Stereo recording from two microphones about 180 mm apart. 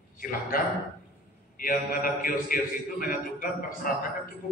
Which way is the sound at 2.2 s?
50° left (ahead or behind).